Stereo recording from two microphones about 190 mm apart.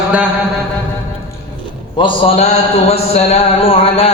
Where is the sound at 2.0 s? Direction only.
25° left (ahead or behind).